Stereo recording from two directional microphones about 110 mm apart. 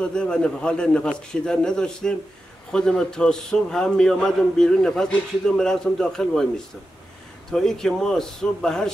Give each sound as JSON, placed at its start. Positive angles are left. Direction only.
{"t": 0.0, "sound": "a man's voice", "side_deg": 10}